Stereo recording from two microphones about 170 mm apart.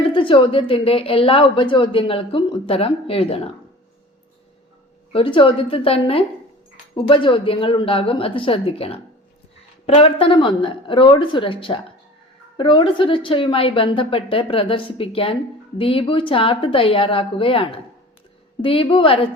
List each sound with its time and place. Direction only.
0.1 s a woman's voice: 30° left (ahead or behind)
5.1 s a woman's voice: 30° left (ahead or behind)